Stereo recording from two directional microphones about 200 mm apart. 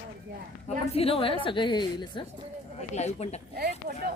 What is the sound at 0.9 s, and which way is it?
A woman's voice, 30° left (ahead or behind).